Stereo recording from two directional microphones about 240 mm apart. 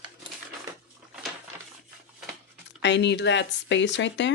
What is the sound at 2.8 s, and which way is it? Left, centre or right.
Speech, left.